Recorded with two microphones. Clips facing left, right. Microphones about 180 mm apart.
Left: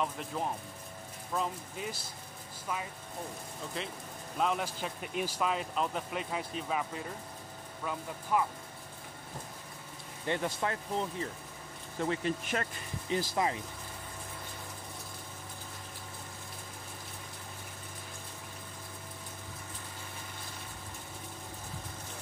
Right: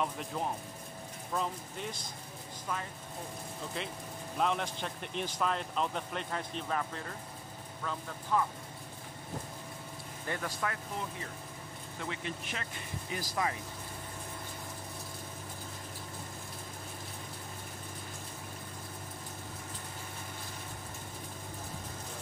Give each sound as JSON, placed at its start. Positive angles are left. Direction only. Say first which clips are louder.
{"t": 0.0, "sound": "speech", "louder": "even", "side_deg": 0}
{"t": 3.8, "sound": "a man's voice", "louder": "left 1 dB", "side_deg": 0}
{"t": 10.2, "sound": "speech", "louder": "left 4 dB", "side_deg": 25}
{"t": 12.0, "sound": "speech", "louder": "left 8 dB", "side_deg": 40}
{"t": 13.1, "sound": "speech", "louder": "left 4 dB", "side_deg": 25}